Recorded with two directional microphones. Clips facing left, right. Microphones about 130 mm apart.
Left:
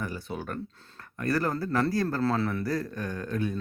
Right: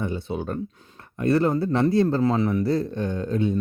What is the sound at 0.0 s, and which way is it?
A man's voice, 25° right (ahead or behind).